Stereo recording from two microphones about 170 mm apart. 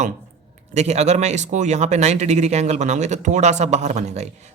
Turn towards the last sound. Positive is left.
turn(degrees=-40)  # may be behind; listen again after turning